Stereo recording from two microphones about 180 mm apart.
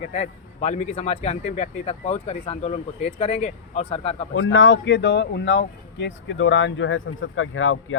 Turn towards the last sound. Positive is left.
turn(degrees=90)